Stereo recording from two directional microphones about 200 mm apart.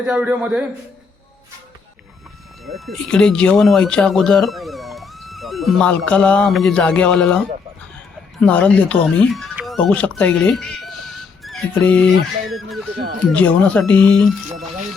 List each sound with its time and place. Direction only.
0.0 s a man's voice: 5° right (ahead or behind)
2.6 s speech: centre (ahead or behind)
8.4 s speech: 5° left (ahead or behind)
13.0 s speech: 40° right (ahead or behind)
13.3 s speech: 5° left (ahead or behind)